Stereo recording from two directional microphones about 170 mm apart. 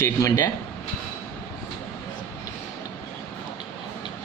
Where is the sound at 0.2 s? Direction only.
20° left (ahead or behind).